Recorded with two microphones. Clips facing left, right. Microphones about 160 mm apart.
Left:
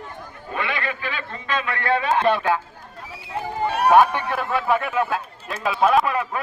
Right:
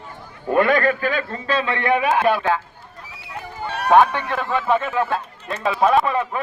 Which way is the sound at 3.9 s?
10° left (ahead or behind).